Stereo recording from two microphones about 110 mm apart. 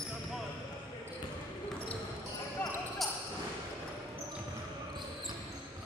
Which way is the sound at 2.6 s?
20° left (ahead or behind).